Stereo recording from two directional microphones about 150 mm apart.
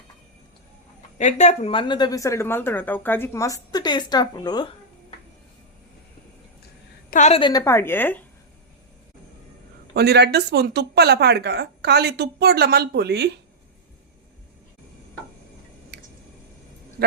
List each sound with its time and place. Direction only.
1.2 s a woman's voice: 50° left (ahead or behind)
1.7 s a woman's voice: 35° left (ahead or behind)
7.1 s a woman's voice: 50° left (ahead or behind)
7.3 s a woman's voice: 30° left (ahead or behind)
7.6 s a woman's voice: 15° left (ahead or behind)
9.9 s speech: 90° right